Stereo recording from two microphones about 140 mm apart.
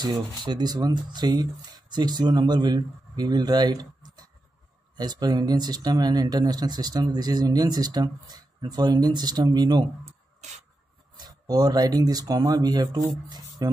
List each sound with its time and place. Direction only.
0.0 s speech: 30° right (ahead or behind)
10.4 s a sound: 55° right (ahead or behind)
11.1 s speech: 30° right (ahead or behind)